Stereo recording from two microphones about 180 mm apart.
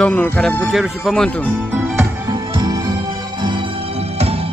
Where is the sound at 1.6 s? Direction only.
10° right (ahead or behind).